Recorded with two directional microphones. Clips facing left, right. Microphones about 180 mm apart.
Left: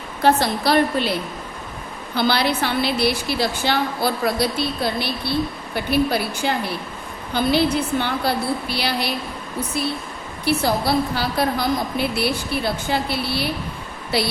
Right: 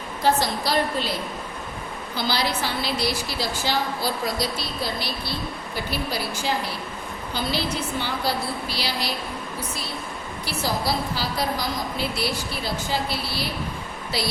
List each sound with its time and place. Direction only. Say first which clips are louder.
0.2 s a woman's voice: left 4 dB; 60° left (ahead or behind)
2.1 s a woman's voice: left 6 dB; 60° left (ahead or behind)
10.4 s a woman's voice: left 7 dB; 60° left (ahead or behind)